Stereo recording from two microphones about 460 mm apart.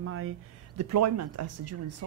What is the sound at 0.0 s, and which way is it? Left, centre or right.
A woman's voice, right.